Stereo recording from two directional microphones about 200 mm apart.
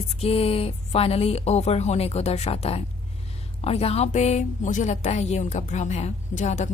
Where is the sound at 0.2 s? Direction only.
30° left (ahead or behind).